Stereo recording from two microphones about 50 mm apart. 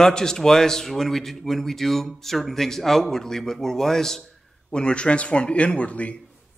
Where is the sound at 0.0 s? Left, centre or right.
Centre; by 6.1 s left.